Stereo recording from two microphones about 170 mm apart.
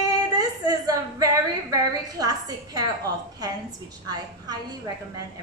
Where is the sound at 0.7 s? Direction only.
20° right (ahead or behind).